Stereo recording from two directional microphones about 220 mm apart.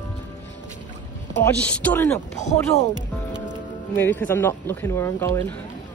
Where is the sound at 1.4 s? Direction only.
10° left (ahead or behind).